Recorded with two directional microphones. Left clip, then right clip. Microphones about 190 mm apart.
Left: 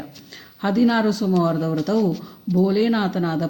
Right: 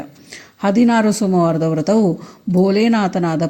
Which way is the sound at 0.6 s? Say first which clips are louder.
Right 5 dB; 35° right (ahead or behind).